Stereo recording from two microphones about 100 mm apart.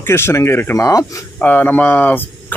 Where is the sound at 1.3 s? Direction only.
15° left (ahead or behind).